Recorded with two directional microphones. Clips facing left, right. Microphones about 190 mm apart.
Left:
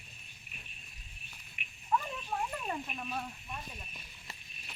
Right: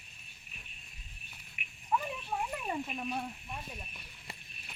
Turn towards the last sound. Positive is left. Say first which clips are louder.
# right 3 dB
turn(degrees=-15)  # may be behind; listen again after turning